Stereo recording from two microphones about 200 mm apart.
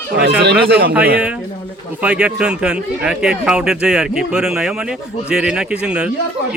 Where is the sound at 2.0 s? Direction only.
5° right (ahead or behind).